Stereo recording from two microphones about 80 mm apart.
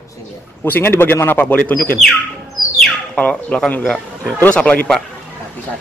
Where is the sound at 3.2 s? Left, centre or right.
Centre.